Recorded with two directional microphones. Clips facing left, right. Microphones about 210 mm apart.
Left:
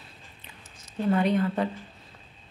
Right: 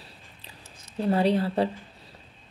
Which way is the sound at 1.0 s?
35° right (ahead or behind).